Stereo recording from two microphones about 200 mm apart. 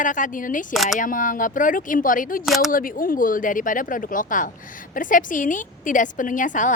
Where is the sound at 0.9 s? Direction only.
40° left (ahead or behind).